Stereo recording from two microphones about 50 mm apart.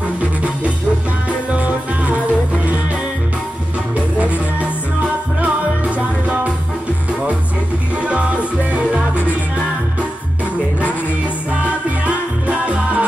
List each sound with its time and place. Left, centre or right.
1.5 s music: right
3.9 s music: right
7.9 s music: right
12.4 s music: right